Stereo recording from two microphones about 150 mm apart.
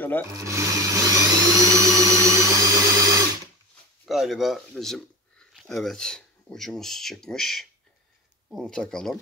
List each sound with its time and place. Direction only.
0.3 s blender: 20° right (ahead or behind)
4.0 s speech: centre (ahead or behind)